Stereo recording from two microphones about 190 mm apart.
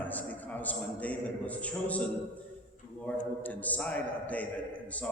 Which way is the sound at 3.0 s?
10° left (ahead or behind).